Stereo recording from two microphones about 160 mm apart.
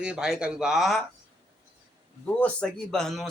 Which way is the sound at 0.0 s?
5° right (ahead or behind).